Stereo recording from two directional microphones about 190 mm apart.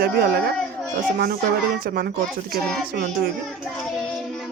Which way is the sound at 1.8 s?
50° right (ahead or behind).